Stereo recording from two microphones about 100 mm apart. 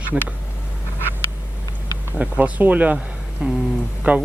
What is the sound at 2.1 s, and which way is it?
Speech, 10° right (ahead or behind).